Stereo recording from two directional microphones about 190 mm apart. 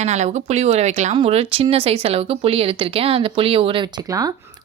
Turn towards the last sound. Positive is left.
turn(degrees=-20)  # may be behind; listen again after turning